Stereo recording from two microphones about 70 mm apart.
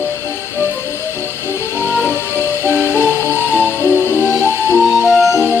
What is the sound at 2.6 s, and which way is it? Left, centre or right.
Music, left.